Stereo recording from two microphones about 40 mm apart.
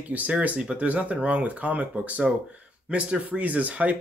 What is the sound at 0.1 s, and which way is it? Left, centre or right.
Speech, right.